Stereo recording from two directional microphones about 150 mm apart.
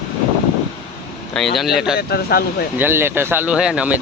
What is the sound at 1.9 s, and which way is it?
Speech, 90° left.